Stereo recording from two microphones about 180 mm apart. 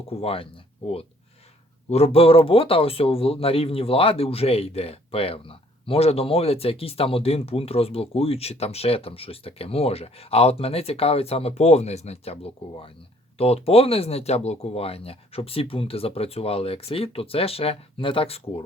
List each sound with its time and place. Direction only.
0.1 s a man's voice: 30° left (ahead or behind)